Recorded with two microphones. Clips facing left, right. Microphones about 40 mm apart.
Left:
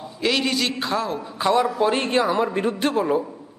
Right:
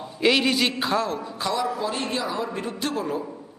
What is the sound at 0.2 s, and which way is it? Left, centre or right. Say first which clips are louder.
A man's voice: right 2 dB; centre.